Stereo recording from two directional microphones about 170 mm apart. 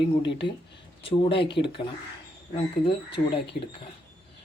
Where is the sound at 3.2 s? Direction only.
55° left (ahead or behind).